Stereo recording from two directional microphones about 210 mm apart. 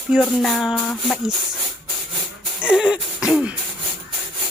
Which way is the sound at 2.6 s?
5° right (ahead or behind).